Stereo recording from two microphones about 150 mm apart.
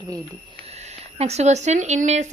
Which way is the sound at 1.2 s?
45° right (ahead or behind).